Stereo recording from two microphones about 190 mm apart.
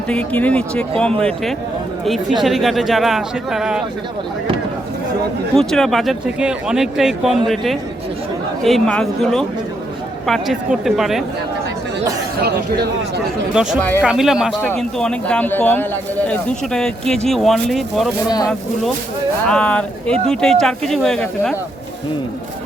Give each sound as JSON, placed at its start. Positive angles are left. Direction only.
{"t": 0.1, "sound": "a man's voice", "side_deg": 5}
{"t": 5.5, "sound": "a man's voice", "side_deg": 0}
{"t": 12.4, "sound": "speech", "side_deg": -55}
{"t": 13.5, "sound": "a man's voice", "side_deg": -5}
{"t": 18.3, "sound": "speech", "side_deg": 20}
{"t": 19.5, "sound": "a man's voice", "side_deg": 5}